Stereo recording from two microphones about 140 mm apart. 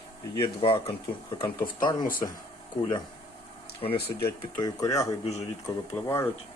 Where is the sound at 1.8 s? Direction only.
30° left (ahead or behind).